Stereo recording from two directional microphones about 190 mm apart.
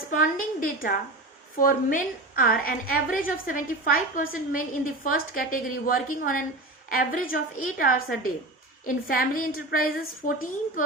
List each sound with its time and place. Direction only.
0.1 s a woman's voice: 45° left (ahead or behind)